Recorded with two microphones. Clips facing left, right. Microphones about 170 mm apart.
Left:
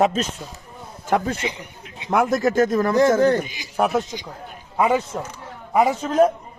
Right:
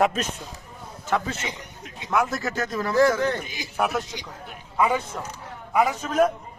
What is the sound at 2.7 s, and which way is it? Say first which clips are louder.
Speech: left 4 dB; 50° left (ahead or behind).